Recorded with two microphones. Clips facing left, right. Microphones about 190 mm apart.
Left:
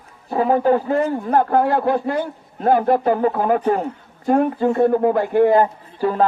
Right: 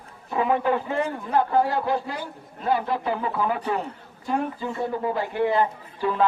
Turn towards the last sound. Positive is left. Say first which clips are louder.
# left 5 dB
turn(degrees=40)  # may be behind; listen again after turning